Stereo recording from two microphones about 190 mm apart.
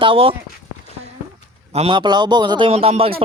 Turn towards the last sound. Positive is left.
turn(degrees=-30)  # may be behind; listen again after turning